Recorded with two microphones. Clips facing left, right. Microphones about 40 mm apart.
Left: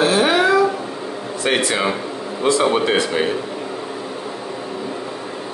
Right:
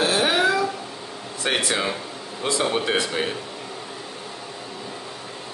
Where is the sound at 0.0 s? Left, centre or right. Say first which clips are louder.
Left 5 dB; centre.